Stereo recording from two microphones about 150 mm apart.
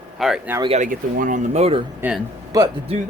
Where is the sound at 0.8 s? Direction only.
65° right (ahead or behind); by 1.8 s 45° right (ahead or behind).